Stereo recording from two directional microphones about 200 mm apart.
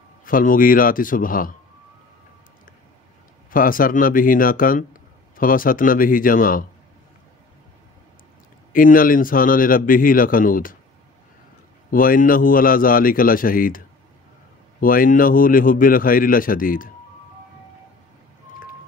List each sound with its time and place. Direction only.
0.2 s a man's voice: 45° left (ahead or behind)
3.4 s a man's voice: 45° left (ahead or behind)
8.7 s a man's voice: 45° left (ahead or behind)
11.9 s a man's voice: 45° left (ahead or behind)